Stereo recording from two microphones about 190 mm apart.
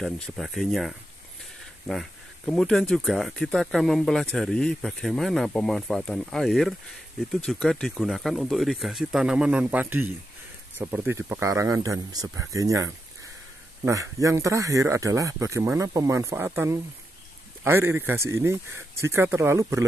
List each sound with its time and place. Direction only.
0.0 s speech: centre (ahead or behind); by 12.9 s 15° right (ahead or behind)
14.2 s speech: 15° right (ahead or behind)